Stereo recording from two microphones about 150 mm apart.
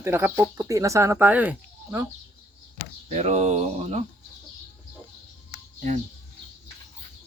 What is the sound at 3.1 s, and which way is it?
Speech, 45° right (ahead or behind).